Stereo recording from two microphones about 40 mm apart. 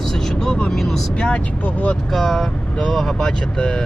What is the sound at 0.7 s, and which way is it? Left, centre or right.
Speech, centre.